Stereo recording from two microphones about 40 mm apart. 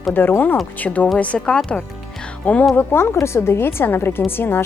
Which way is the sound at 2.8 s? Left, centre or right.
Left.